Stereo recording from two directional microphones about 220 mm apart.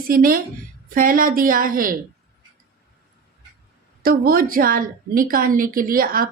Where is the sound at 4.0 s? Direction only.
40° right (ahead or behind).